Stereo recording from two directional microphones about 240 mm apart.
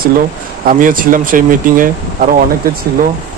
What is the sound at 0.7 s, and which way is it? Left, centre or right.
Speech, right.